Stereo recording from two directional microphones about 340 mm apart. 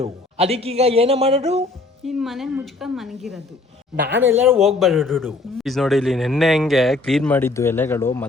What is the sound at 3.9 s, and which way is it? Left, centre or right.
Speech, right.